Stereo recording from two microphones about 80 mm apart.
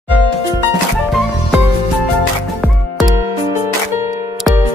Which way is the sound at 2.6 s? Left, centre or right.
Centre.